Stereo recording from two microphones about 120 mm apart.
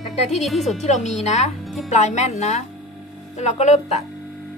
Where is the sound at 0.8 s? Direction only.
70° left (ahead or behind).